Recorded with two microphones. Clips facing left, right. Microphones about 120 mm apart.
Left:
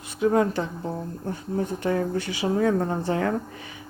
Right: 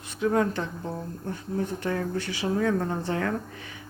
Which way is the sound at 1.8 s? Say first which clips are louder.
Left 4 dB; 15° left (ahead or behind).